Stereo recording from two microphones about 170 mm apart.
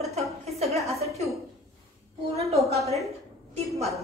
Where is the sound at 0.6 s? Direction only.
40° right (ahead or behind).